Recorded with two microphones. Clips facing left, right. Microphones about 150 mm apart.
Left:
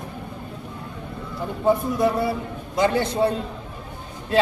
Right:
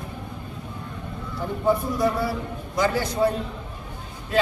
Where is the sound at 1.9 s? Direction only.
25° left (ahead or behind).